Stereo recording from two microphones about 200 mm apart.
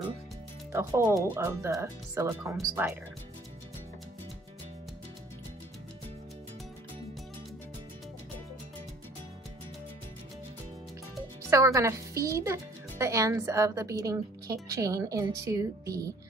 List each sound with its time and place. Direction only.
0.7 s speech: 15° right (ahead or behind)
11.5 s speech: 15° right (ahead or behind)